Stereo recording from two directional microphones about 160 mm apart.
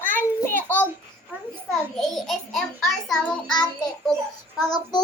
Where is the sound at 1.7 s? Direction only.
Centre (ahead or behind).